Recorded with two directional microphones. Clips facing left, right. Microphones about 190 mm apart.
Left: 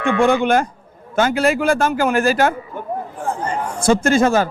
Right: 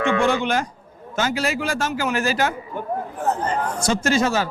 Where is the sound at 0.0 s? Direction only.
55° left (ahead or behind).